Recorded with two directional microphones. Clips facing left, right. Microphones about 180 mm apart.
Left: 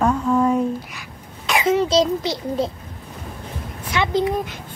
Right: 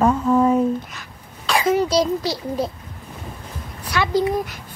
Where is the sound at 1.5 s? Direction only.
25° left (ahead or behind).